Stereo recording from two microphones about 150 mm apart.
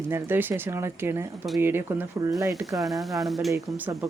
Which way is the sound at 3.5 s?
15° right (ahead or behind).